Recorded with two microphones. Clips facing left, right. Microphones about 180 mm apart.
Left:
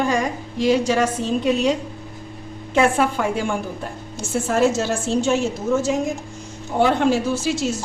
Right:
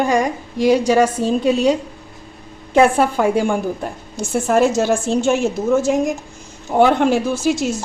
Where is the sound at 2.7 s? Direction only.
40° right (ahead or behind).